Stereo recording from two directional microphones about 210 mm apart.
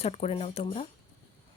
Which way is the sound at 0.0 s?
30° left (ahead or behind).